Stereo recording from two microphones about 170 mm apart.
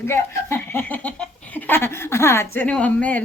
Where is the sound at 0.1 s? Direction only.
15° left (ahead or behind).